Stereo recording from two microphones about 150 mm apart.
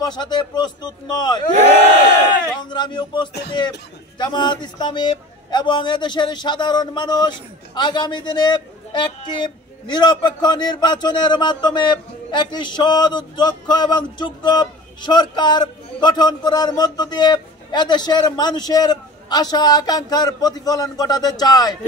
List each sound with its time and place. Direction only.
0.0 s a man's voice: 30° left (ahead or behind)
2.6 s a man's voice: 30° left (ahead or behind)